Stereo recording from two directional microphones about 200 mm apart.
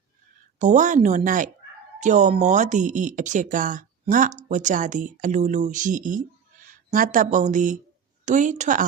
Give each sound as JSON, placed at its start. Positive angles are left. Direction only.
{"t": 0.6, "sound": "speech", "side_deg": -40}